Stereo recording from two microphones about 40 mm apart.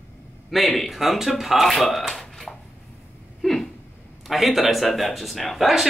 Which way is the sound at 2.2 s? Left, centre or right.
Centre.